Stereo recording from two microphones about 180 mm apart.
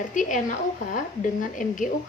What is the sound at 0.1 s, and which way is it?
A woman's voice, 45° left (ahead or behind).